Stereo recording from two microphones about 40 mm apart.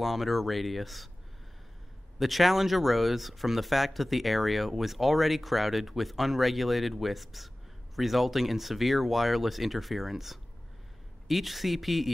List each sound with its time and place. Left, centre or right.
0.0 s speech: centre
2.1 s speech: centre